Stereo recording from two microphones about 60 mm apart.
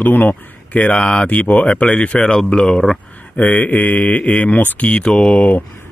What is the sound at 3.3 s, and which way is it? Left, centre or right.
Speech, left.